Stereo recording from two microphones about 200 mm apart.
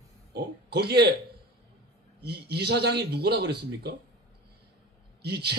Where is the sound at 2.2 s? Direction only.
55° right (ahead or behind).